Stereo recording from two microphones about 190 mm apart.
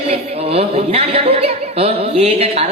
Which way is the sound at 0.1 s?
30° right (ahead or behind).